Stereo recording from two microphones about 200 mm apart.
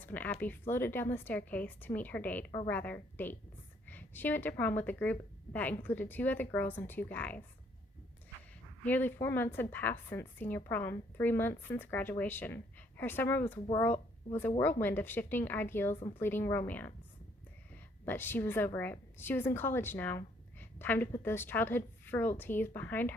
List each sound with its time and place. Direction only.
0.0 s a woman's voice: 10° left (ahead or behind)
8.8 s a woman's voice: 10° left (ahead or behind)
16.0 s a woman's voice: 25° left (ahead or behind)
16.2 s a woman's voice: 10° left (ahead or behind)
18.0 s a woman's voice: 10° left (ahead or behind)